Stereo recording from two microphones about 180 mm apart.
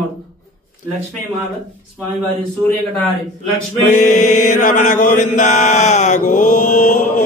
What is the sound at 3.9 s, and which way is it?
Chant, 45° left (ahead or behind).